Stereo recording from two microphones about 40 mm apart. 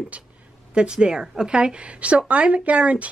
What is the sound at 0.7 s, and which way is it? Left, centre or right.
A woman's voice, right.